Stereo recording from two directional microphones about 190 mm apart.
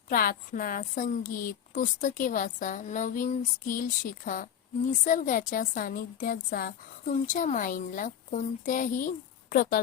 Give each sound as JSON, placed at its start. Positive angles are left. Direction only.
{"t": 0.1, "sound": "a woman's voice", "side_deg": 50}
{"t": 5.0, "sound": "a woman's voice", "side_deg": 45}